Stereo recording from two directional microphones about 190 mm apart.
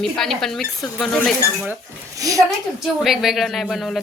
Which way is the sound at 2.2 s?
15° right (ahead or behind).